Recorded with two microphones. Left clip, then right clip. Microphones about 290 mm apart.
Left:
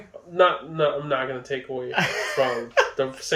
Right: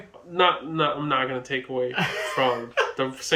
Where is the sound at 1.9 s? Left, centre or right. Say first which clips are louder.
Left 2 dB; centre.